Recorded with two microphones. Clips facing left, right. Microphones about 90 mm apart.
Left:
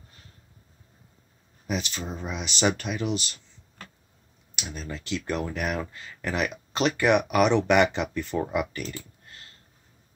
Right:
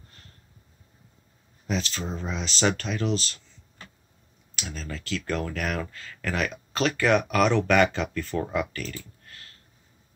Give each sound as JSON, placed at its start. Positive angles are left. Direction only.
{"t": 1.7, "sound": "speech", "side_deg": 15}
{"t": 4.6, "sound": "speech", "side_deg": 15}